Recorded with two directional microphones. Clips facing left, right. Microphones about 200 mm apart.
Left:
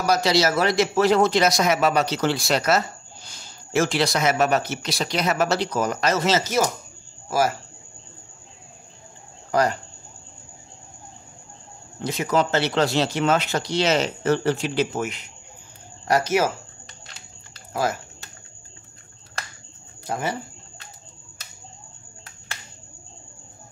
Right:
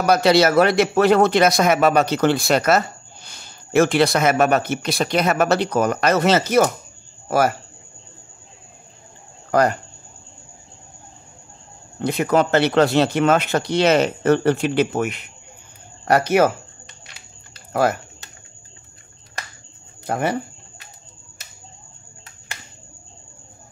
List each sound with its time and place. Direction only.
0.0 s a man's voice: 60° right (ahead or behind)
9.5 s speech: 55° right (ahead or behind)
12.0 s speech: 60° right (ahead or behind)
17.7 s speech: 60° right (ahead or behind)
20.1 s speech: 60° right (ahead or behind)